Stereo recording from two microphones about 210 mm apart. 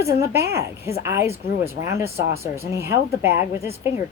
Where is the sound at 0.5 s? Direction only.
15° right (ahead or behind).